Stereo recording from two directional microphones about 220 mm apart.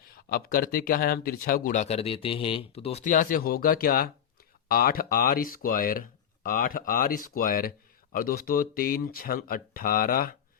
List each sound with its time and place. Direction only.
0.0 s speech: 40° left (ahead or behind)